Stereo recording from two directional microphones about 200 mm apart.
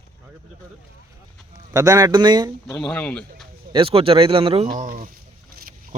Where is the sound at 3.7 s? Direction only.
25° right (ahead or behind).